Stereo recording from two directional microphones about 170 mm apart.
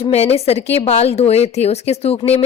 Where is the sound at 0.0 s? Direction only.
40° left (ahead or behind).